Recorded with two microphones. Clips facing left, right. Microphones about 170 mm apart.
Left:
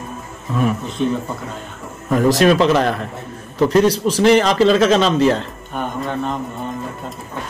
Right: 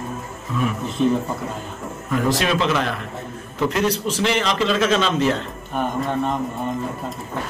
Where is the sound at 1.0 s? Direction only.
Centre (ahead or behind).